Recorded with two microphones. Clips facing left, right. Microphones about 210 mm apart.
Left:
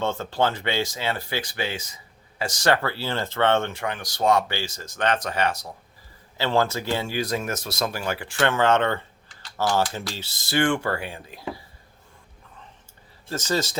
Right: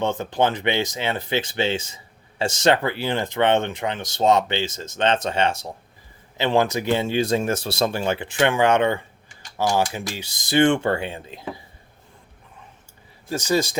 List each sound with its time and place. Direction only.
0.0 s speech: 15° right (ahead or behind)
13.2 s speech: 15° right (ahead or behind)